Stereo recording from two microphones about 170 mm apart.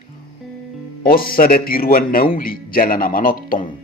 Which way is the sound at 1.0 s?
60° left (ahead or behind).